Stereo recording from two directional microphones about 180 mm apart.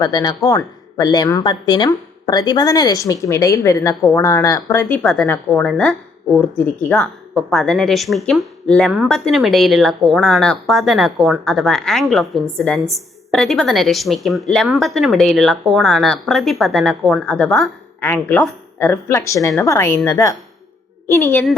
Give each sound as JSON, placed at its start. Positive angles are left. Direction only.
{"t": 0.0, "sound": "a woman's voice", "side_deg": 20}